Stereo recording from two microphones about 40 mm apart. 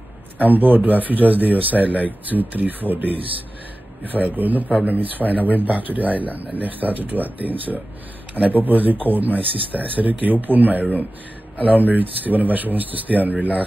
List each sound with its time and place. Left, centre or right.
0.4 s speech: right